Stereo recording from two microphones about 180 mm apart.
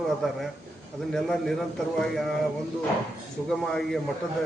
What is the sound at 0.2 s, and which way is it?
A man's voice, centre (ahead or behind).